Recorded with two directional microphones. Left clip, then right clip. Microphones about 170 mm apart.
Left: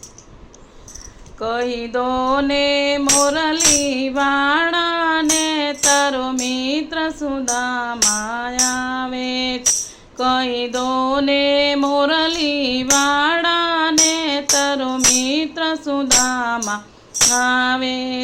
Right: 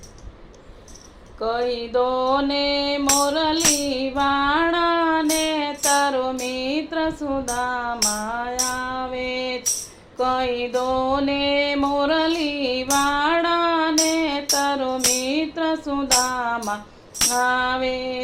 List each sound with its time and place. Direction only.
1.4 s a sound: 30° left (ahead or behind)
3.8 s female singing: 30° left (ahead or behind)
5.3 s music: 30° left (ahead or behind)